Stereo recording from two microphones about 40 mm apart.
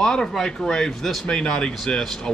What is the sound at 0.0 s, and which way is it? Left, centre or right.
Speech, centre.